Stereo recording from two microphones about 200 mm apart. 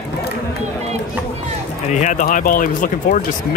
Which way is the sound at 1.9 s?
40° left (ahead or behind).